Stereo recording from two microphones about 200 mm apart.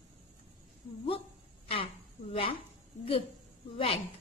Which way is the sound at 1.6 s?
25° left (ahead or behind).